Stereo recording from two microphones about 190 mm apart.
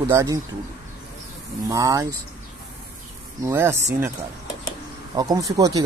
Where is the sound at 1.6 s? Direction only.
20° right (ahead or behind).